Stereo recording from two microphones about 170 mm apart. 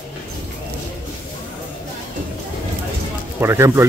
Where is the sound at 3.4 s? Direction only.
15° right (ahead or behind).